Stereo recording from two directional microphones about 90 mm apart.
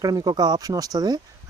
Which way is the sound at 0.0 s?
50° right (ahead or behind).